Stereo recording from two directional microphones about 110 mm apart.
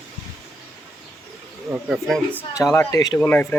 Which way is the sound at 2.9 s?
35° left (ahead or behind).